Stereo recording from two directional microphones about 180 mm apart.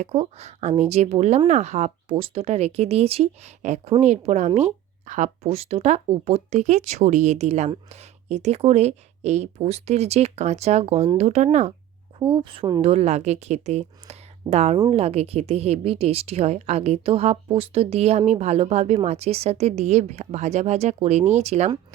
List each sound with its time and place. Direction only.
0.0 s a woman's voice: 35° right (ahead or behind)
12.2 s a woman's voice: 25° right (ahead or behind)